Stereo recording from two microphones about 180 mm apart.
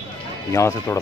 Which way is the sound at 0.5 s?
15° left (ahead or behind).